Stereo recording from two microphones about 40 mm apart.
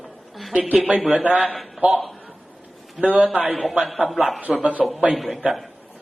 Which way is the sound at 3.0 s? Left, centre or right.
Right.